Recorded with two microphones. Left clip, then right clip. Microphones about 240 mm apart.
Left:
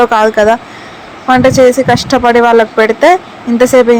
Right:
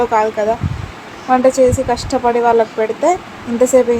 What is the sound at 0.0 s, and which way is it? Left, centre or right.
Speech, centre.